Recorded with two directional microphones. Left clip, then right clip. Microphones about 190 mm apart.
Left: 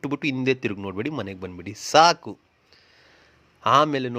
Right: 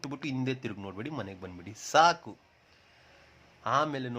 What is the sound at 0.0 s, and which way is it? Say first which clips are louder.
A man's voice: left 10 dB; 35° left (ahead or behind).